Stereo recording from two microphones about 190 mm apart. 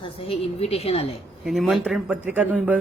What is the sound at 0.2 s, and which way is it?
Speech, 30° left (ahead or behind).